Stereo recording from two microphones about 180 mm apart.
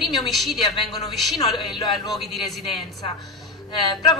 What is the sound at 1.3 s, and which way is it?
Speech, 25° left (ahead or behind).